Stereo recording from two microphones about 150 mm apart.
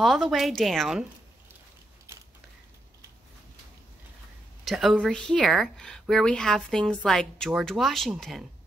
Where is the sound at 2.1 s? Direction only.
20° right (ahead or behind).